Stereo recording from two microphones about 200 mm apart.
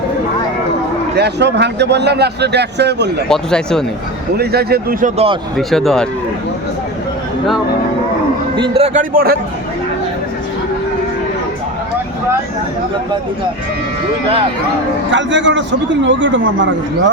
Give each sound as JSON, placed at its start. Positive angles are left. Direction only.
{"t": 1.1, "sound": "a man's voice", "side_deg": -55}
{"t": 3.2, "sound": "speech", "side_deg": 5}
{"t": 4.4, "sound": "a man's voice", "side_deg": -50}
{"t": 5.5, "sound": "speech", "side_deg": 0}
{"t": 8.5, "sound": "a man's voice", "side_deg": -25}
{"t": 15.1, "sound": "speech", "side_deg": -65}